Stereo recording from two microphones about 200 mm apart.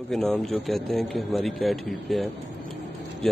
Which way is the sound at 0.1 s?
5° left (ahead or behind).